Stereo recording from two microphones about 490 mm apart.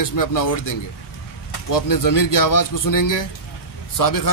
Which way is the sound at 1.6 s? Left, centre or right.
Left.